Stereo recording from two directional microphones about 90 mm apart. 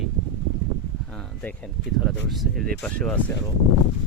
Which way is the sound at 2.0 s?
Centre (ahead or behind).